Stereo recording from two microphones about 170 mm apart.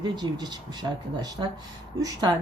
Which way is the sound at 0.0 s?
25° right (ahead or behind).